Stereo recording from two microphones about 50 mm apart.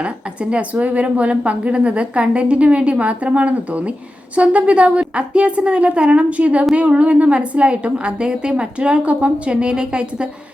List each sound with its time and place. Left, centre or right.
0.5 s a woman's voice: right